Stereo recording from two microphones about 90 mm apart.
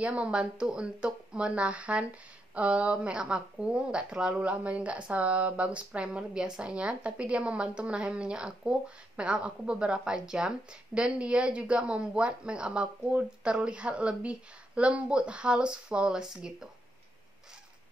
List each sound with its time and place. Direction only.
0.0 s speech: 15° right (ahead or behind)